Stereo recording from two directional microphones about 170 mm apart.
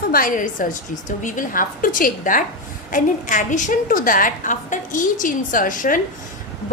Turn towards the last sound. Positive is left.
turn(degrees=50)  # may be behind; listen again after turning